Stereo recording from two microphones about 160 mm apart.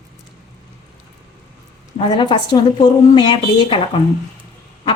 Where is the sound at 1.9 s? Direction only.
30° left (ahead or behind).